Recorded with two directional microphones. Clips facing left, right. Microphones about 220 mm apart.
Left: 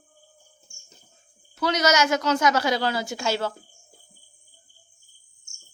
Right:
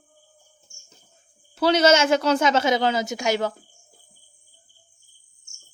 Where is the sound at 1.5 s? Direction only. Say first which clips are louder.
Right 5 dB; 30° right (ahead or behind).